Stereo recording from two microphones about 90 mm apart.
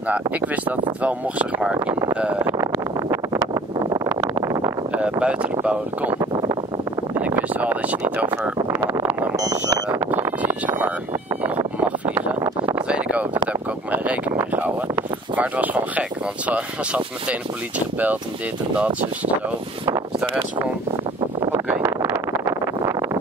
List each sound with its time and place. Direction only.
0.1 s speech: 20° right (ahead or behind)
2.4 s wind noise: 35° right (ahead or behind)
5.2 s speech: 15° right (ahead or behind)
7.2 s speech: 15° right (ahead or behind)
8.7 s vehicle: 30° right (ahead or behind)
9.9 s a sound: 30° right (ahead or behind)
10.4 s speech: 20° right (ahead or behind)
11.4 s vehicle: 20° right (ahead or behind)
12.7 s speech: 15° right (ahead or behind)
21.6 s a sound: 25° right (ahead or behind)